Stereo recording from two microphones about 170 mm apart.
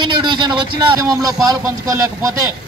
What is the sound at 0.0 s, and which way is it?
A man's voice, 25° right (ahead or behind).